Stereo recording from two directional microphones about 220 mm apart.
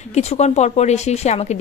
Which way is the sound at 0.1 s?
30° left (ahead or behind).